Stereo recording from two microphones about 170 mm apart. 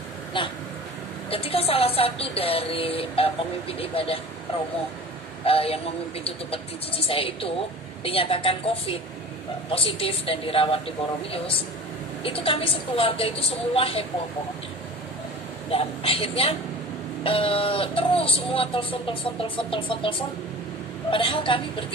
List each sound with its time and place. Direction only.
0.3 s a woman's voice: 30° left (ahead or behind)
5.4 s a woman's voice: 35° left (ahead or behind)
15.7 s a woman's voice: 35° left (ahead or behind)